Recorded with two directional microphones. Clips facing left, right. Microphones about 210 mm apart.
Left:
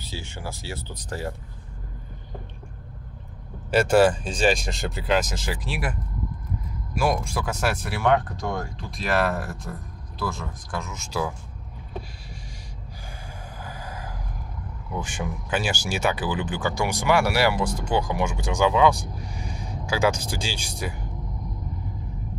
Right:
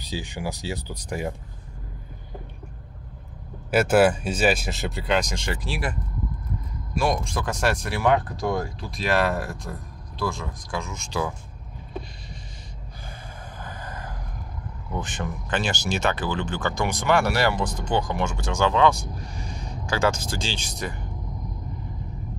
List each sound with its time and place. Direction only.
0.0 s speech: 15° right (ahead or behind)
3.7 s speech: 5° right (ahead or behind)
7.0 s speech: 5° left (ahead or behind)
13.6 s a sound: 10° left (ahead or behind)
14.9 s speech: 10° left (ahead or behind)